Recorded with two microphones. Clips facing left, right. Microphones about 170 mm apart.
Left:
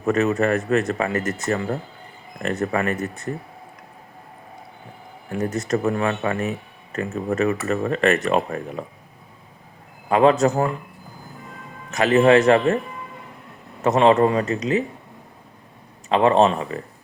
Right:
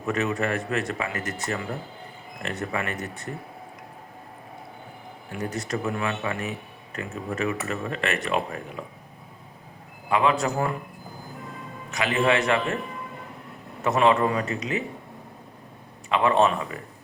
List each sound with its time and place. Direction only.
0.0 s speech: 40° left (ahead or behind)
5.3 s speech: 45° left (ahead or behind)
10.1 s a man's voice: 40° left (ahead or behind)
11.9 s speech: 45° left (ahead or behind)
13.8 s a man's voice: 40° left (ahead or behind)
16.0 s a man's voice: 35° left (ahead or behind)